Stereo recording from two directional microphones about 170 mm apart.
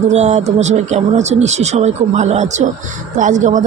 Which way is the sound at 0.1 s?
40° right (ahead or behind).